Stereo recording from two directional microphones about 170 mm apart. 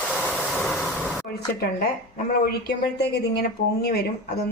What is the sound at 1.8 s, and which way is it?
Speech, 65° left (ahead or behind).